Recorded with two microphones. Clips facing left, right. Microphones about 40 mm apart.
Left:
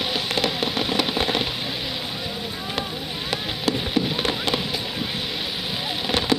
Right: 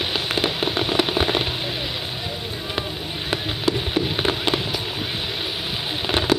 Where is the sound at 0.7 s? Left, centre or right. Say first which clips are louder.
Right 2 dB; right.